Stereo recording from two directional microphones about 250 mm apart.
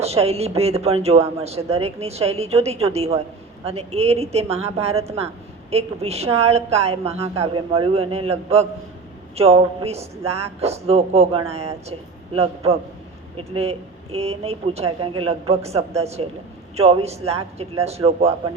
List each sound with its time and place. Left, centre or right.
0.0 s a man's voice: right